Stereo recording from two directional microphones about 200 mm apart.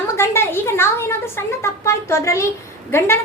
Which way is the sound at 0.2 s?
10° left (ahead or behind).